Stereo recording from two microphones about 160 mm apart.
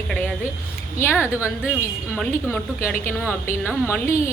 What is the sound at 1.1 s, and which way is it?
Speech, 10° right (ahead or behind).